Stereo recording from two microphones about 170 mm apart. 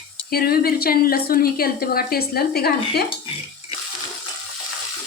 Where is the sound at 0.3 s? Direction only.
65° left (ahead or behind).